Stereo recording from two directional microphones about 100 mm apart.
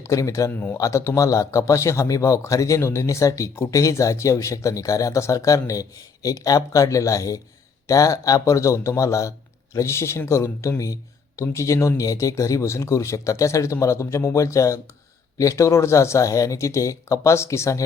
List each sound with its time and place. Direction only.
0.0 s speech: 30° left (ahead or behind)
0.5 s speech: 20° left (ahead or behind)